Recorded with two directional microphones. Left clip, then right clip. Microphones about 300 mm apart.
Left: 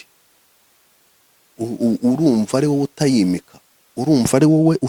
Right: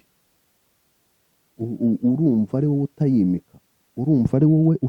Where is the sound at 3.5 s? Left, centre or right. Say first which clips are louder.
Left 6 dB; centre.